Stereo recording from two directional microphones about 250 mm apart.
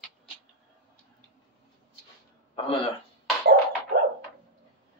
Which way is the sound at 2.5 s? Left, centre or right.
Left.